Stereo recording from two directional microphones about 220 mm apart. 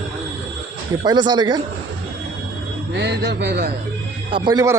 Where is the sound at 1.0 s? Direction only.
20° right (ahead or behind).